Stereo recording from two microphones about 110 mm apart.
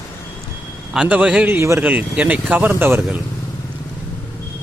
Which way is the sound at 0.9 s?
10° right (ahead or behind).